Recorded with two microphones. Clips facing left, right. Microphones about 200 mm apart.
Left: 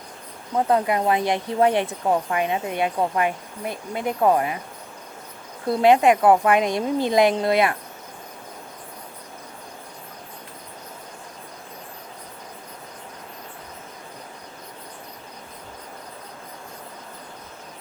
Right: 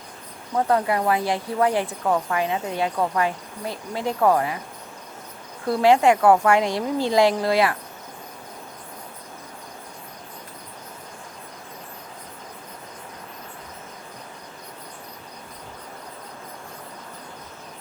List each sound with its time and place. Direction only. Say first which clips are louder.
0.5 s speech: left 1 dB; 20° left (ahead or behind)
5.6 s speech: left 1 dB; 20° left (ahead or behind)